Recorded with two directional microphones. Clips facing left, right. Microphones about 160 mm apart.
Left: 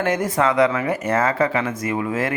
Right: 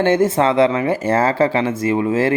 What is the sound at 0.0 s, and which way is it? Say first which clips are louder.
Speech: right 5 dB; 25° right (ahead or behind).